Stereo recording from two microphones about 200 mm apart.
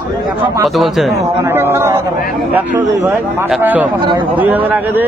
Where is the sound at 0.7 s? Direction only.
Centre (ahead or behind).